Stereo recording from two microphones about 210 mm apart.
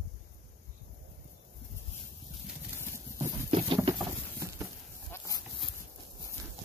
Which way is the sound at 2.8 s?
10° right (ahead or behind).